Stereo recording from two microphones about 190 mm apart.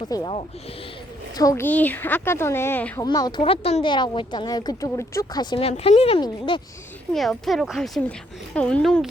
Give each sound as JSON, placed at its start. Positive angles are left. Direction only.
{"t": 0.0, "sound": "speech", "side_deg": 20}
{"t": 1.4, "sound": "speech", "side_deg": 15}
{"t": 3.1, "sound": "speech", "side_deg": 20}
{"t": 7.1, "sound": "speech", "side_deg": 0}